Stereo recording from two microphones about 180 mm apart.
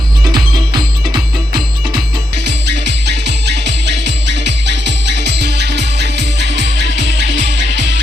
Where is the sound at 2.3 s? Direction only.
70° right (ahead or behind).